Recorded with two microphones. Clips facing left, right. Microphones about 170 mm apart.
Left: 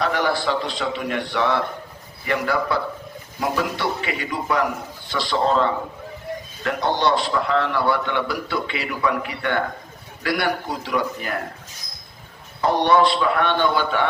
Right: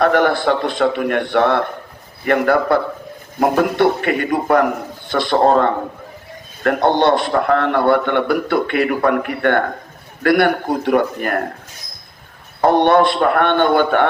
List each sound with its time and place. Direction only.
0.0 s a man's voice: 55° right (ahead or behind)
12.6 s a man's voice: 55° right (ahead or behind)